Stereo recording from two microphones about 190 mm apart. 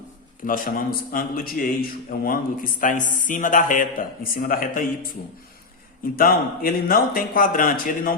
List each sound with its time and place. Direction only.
0.4 s a man's voice: 45° left (ahead or behind)
6.1 s a man's voice: 50° left (ahead or behind)